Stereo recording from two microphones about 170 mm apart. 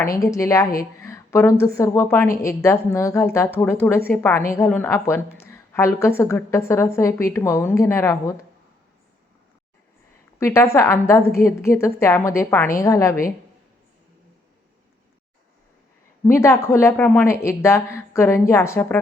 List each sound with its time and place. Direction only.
0.2 s a woman's voice: 20° left (ahead or behind)
10.4 s a woman's voice: 15° left (ahead or behind)
16.2 s a woman's voice: 15° left (ahead or behind)